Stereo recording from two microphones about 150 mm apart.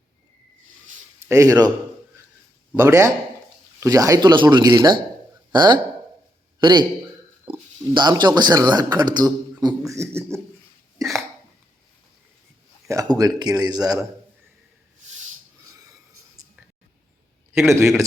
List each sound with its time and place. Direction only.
1.3 s a man's voice: 20° right (ahead or behind)
2.7 s a man's voice: 15° right (ahead or behind)
7.9 s a man's voice: 30° right (ahead or behind)
13.1 s a man's voice: 25° right (ahead or behind)
17.6 s a man's voice: 20° right (ahead or behind)